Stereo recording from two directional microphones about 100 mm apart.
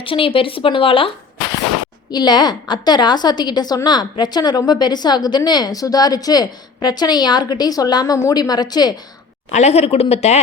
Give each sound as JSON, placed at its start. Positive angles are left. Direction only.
{"t": 0.0, "sound": "speech", "side_deg": 65}
{"t": 2.0, "sound": "a woman's voice", "side_deg": 45}
{"t": 9.6, "sound": "speech", "side_deg": 90}